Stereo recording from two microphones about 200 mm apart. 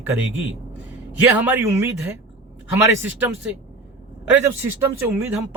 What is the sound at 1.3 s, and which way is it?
Speech, 10° right (ahead or behind).